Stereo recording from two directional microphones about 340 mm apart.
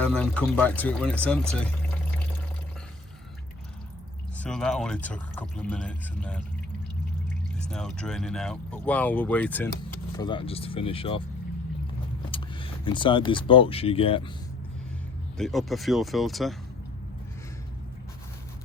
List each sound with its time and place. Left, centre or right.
0.0 s speech: centre
4.4 s speech: centre
7.7 s speech: centre
12.3 s speech: centre
15.4 s speech: centre